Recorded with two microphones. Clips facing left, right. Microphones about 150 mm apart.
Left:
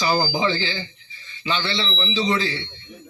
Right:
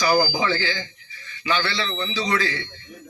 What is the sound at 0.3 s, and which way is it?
A man's voice, 20° left (ahead or behind).